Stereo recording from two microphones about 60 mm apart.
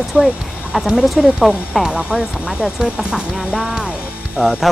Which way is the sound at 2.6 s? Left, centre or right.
Centre.